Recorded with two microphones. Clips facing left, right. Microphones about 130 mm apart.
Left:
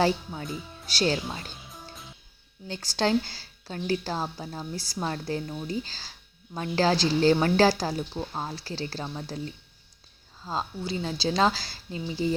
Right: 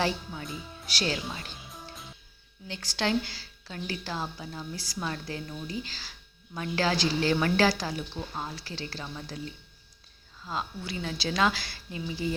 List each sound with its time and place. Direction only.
0.4 s speech: centre (ahead or behind)
0.9 s speech: 35° left (ahead or behind)
1.5 s music: centre (ahead or behind)
2.6 s speech: 35° left (ahead or behind)
10.4 s speech: 30° left (ahead or behind)